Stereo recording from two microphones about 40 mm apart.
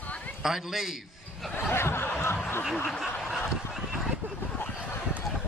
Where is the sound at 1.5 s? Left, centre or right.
Left.